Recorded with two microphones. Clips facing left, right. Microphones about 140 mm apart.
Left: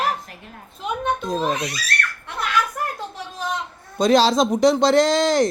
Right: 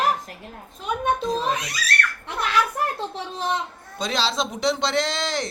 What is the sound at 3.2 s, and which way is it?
Speech, 25° right (ahead or behind).